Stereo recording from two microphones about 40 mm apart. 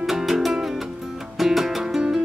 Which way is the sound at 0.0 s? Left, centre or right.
Centre.